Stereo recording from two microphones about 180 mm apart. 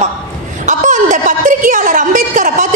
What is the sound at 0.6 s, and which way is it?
A woman's voice, 45° right (ahead or behind).